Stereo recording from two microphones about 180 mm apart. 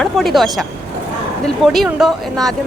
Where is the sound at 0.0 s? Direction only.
Centre (ahead or behind).